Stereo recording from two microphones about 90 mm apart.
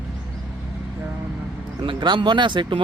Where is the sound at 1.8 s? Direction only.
65° right (ahead or behind).